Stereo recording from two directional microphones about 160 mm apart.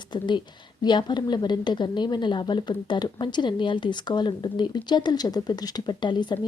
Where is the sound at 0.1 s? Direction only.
30° left (ahead or behind).